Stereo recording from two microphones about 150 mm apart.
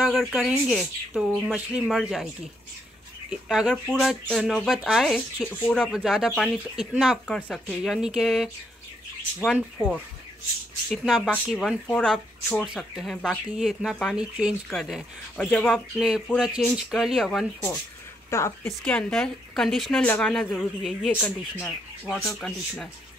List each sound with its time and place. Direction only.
0.0 s speech: centre (ahead or behind)
3.3 s speech: 5° right (ahead or behind)
7.2 s speech: 5° left (ahead or behind)
18.3 s a woman's voice: 20° left (ahead or behind)
18.7 s speech: 5° left (ahead or behind)